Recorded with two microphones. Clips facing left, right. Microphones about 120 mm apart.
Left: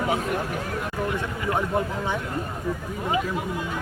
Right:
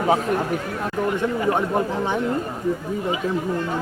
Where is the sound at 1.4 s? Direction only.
25° right (ahead or behind).